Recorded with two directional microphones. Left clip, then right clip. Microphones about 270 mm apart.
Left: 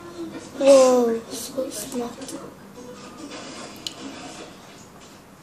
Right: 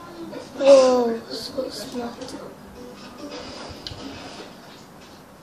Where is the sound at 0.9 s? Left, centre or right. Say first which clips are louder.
Left 1 dB; left.